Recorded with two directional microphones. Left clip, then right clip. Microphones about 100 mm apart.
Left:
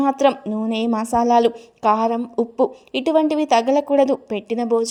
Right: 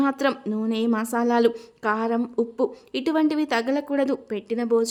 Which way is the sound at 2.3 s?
15° left (ahead or behind).